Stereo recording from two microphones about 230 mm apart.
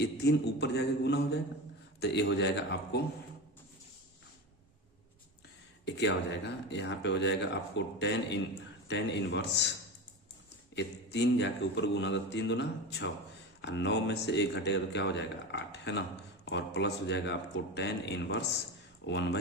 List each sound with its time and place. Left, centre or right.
0.0 s speech: left
5.8 s speech: left
10.8 s speech: left